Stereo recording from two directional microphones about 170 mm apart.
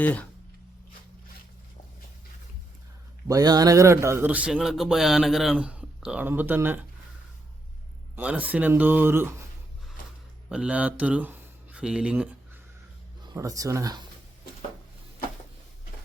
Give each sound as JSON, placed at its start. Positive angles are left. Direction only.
{"t": 0.0, "sound": "speech", "side_deg": 10}
{"t": 3.2, "sound": "a man's voice", "side_deg": -20}
{"t": 8.1, "sound": "a man's voice", "side_deg": -10}
{"t": 10.5, "sound": "speech", "side_deg": -5}
{"t": 13.3, "sound": "speech", "side_deg": -20}